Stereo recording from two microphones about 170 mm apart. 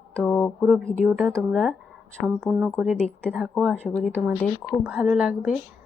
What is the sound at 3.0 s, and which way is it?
A woman's voice, centre (ahead or behind).